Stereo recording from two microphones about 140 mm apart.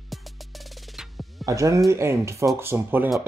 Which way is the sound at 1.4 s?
25° right (ahead or behind).